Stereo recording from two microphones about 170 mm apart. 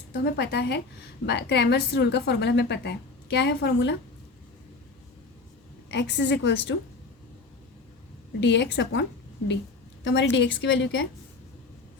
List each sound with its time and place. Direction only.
0.1 s a woman's voice: 80° left
5.9 s a woman's voice: 90° left
8.4 s a woman's voice: 90° left